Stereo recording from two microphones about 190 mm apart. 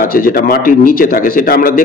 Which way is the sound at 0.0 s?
50° left (ahead or behind).